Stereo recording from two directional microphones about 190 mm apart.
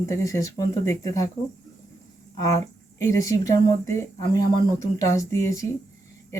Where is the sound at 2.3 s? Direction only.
15° left (ahead or behind).